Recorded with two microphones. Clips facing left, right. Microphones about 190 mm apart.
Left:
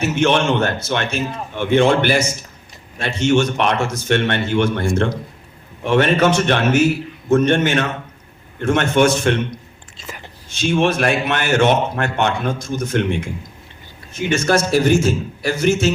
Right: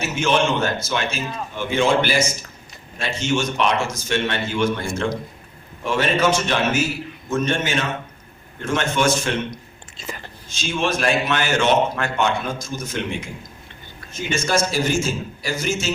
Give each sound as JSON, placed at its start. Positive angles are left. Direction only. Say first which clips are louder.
{"t": 0.0, "sound": "a man's voice", "louder": "left 4 dB", "side_deg": 65}
{"t": 10.5, "sound": "a man's voice", "louder": "left 6 dB", "side_deg": 60}
{"t": 14.3, "sound": "a man's voice", "louder": "left 5 dB", "side_deg": 60}